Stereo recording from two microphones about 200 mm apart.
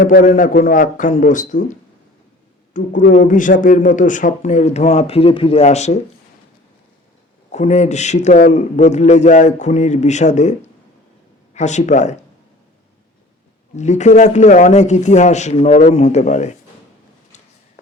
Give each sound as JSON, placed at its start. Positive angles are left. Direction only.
{"t": 0.0, "sound": "a man's voice", "side_deg": 45}
{"t": 2.8, "sound": "a man's voice", "side_deg": 40}
{"t": 7.5, "sound": "a man's voice", "side_deg": 35}
{"t": 13.7, "sound": "a man's voice", "side_deg": 35}